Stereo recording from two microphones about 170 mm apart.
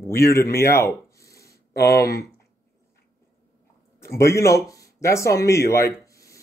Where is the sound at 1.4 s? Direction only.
65° left (ahead or behind).